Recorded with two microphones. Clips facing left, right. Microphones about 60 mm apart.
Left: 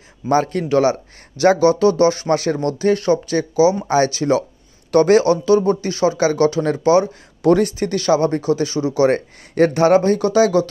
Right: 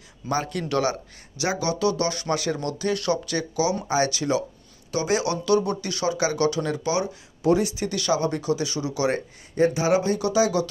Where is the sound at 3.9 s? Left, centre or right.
Left.